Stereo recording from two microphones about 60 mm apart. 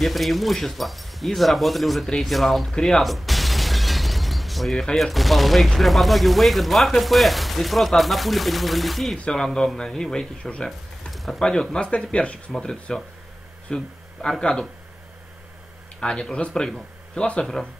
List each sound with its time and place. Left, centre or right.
0.0 s speech: centre
11.1 s a sound: centre
11.4 s speech: centre
13.7 s a sound: centre
14.4 s speech: centre
16.0 s speech: centre